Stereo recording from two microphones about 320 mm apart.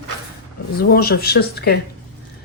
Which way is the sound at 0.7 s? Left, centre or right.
Left.